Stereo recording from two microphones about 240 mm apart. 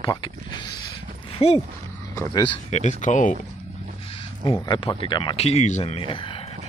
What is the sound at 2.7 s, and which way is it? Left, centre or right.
Speech, left.